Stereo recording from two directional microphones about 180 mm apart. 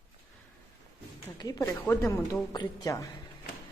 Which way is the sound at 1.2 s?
20° left (ahead or behind).